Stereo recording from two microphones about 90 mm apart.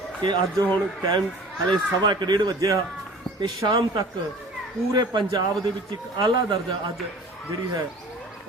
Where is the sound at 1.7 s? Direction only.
55° right (ahead or behind).